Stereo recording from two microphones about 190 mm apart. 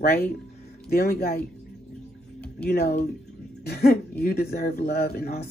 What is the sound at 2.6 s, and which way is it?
Speech, 55° left (ahead or behind).